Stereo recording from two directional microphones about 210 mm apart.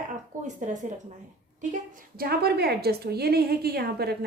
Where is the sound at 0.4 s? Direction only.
35° right (ahead or behind).